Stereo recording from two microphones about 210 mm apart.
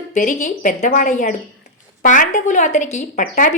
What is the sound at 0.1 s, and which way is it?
A woman's voice, 35° left (ahead or behind).